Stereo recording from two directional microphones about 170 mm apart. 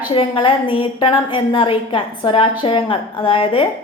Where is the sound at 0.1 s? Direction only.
30° left (ahead or behind).